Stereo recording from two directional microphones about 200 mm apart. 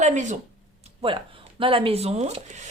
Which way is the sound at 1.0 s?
25° right (ahead or behind).